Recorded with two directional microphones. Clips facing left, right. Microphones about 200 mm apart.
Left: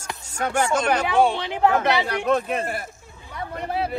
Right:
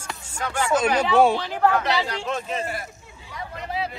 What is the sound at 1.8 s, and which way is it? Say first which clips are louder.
A woman's voice: left 3 dB; 60° left (ahead or behind).